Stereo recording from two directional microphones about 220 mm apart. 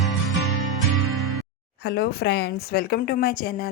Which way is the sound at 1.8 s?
50° left (ahead or behind).